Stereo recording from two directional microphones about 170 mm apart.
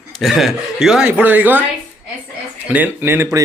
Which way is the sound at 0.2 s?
Centre (ahead or behind).